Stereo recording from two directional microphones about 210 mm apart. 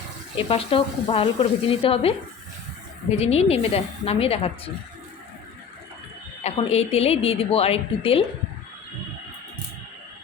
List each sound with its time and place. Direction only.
0.3 s a woman's voice: 25° left (ahead or behind)
3.2 s a woman's voice: 30° left (ahead or behind)
6.4 s a woman's voice: 30° left (ahead or behind)